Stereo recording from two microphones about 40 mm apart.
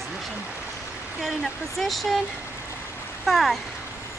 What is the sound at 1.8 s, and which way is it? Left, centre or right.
Speech, centre.